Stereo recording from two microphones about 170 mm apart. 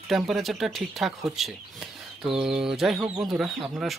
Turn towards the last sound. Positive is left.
turn(degrees=0)  # may be behind; listen again after turning